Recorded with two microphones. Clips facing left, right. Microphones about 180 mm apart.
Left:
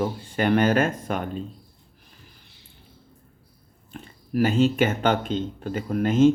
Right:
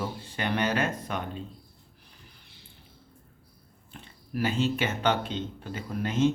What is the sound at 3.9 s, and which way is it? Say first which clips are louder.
Speech: left 8 dB; 50° left (ahead or behind).